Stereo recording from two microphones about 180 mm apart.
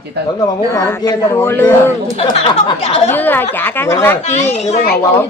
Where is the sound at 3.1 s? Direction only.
10° left (ahead or behind).